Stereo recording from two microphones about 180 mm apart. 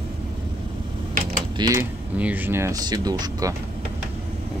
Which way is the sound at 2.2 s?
10° right (ahead or behind).